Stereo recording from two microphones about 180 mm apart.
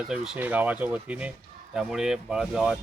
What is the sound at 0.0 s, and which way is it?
Speech, 5° right (ahead or behind).